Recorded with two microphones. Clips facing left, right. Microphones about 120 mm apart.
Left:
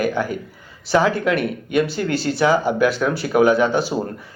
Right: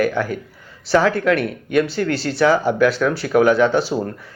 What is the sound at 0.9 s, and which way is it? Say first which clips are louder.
Speech: right 2 dB; centre (ahead or behind).